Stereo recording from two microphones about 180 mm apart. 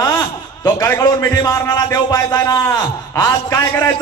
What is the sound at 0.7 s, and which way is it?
A man's voice, 20° left (ahead or behind).